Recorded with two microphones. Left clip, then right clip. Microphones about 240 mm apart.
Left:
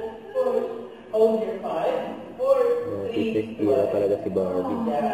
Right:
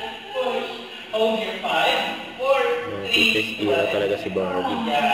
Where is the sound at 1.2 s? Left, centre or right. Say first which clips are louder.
Left 1 dB; centre.